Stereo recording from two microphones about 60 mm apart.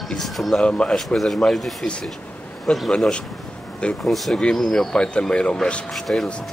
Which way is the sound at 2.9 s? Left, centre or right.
Centre.